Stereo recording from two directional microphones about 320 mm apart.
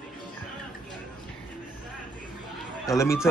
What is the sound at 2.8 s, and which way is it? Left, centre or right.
Speech, centre.